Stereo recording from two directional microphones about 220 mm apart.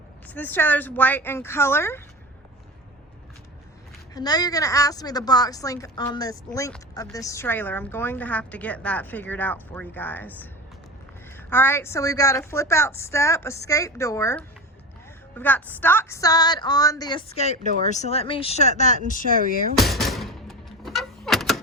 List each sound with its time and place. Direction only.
0.3 s a woman's voice: 10° left (ahead or behind)
4.1 s a woman's voice: 15° left (ahead or behind); by 19.3 s 35° left (ahead or behind)
19.8 s door: centre (ahead or behind)